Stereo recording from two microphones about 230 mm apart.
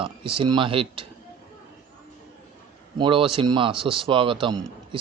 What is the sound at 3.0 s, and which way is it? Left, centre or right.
Speech, right.